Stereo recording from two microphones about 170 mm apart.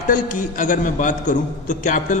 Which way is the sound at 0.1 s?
50° left (ahead or behind).